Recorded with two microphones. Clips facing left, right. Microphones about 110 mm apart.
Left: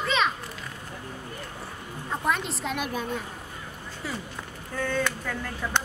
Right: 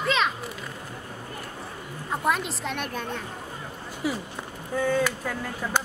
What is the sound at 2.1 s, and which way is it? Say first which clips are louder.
A woman's voice: right 2 dB; 5° right (ahead or behind).